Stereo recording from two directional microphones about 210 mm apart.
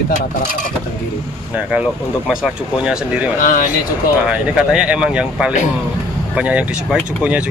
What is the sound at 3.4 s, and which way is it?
Speech, 40° left (ahead or behind).